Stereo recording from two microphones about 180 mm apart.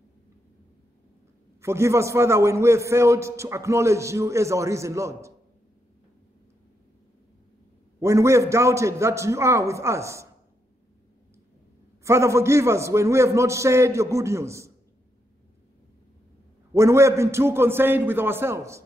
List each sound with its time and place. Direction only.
1.6 s a man's voice: 15° right (ahead or behind)
8.0 s a man's voice: 15° right (ahead or behind)
12.0 s a man's voice: 15° right (ahead or behind)
16.7 s a man's voice: 15° right (ahead or behind)